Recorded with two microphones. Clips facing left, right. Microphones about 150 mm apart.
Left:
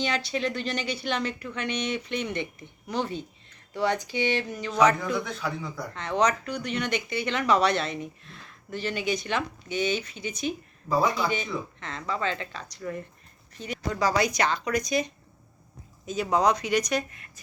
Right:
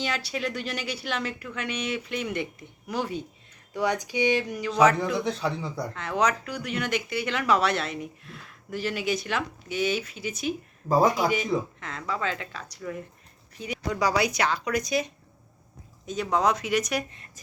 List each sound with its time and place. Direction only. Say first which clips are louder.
0.0 s speech: left 2 dB; 5° right (ahead or behind)
5.1 s speech: right 3 dB; 30° right (ahead or behind)
5.9 s speech: left 2 dB; 5° right (ahead or behind)
10.8 s speech: right 3 dB; 45° right (ahead or behind)
11.8 s speech: even; 5° right (ahead or behind)